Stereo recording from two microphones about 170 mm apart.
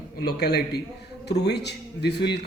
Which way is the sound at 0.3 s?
70° left (ahead or behind).